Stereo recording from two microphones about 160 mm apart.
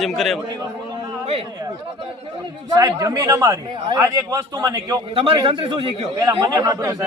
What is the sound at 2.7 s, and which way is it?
Speech, 25° right (ahead or behind).